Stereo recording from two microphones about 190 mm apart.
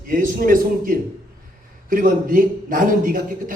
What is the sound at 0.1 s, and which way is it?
A man's voice, 45° right (ahead or behind).